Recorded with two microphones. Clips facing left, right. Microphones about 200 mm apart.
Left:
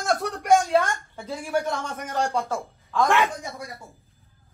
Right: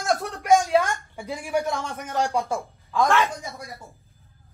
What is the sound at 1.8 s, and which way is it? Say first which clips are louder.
Speech: right 1 dB; centre (ahead or behind).